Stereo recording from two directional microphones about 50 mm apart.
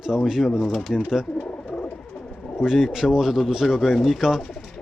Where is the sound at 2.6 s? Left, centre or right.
Centre.